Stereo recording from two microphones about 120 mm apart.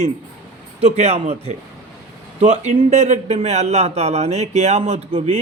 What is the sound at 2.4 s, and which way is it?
A man's voice, 70° right (ahead or behind).